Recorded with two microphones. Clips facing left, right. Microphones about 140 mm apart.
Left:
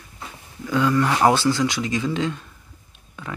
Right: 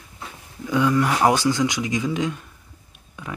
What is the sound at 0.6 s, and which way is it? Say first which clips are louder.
Speech: even; 15° right (ahead or behind).